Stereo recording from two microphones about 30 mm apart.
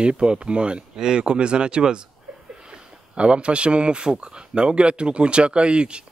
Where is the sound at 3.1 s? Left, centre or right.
Right.